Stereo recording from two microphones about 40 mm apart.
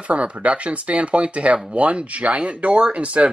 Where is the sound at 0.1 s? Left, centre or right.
Right.